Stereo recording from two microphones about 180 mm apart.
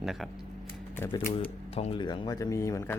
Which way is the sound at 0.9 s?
10° left (ahead or behind).